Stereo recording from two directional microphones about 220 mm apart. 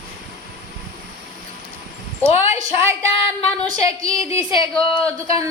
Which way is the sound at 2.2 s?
15° right (ahead or behind).